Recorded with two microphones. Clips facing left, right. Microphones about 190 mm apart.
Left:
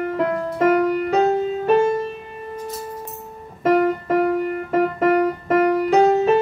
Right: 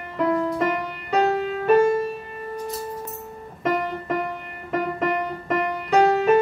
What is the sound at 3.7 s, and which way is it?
Music, centre (ahead or behind).